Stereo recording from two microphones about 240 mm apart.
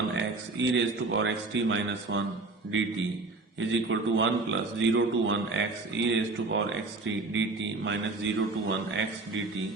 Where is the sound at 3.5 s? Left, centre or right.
Right.